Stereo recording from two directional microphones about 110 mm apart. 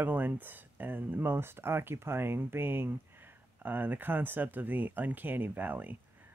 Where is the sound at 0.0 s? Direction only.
15° right (ahead or behind).